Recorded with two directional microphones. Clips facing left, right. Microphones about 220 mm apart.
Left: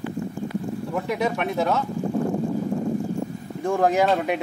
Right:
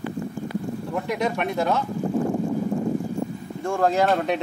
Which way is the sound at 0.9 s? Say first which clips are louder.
Even; 5° left (ahead or behind).